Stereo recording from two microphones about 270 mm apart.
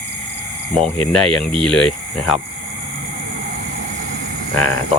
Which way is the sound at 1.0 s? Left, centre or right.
Centre.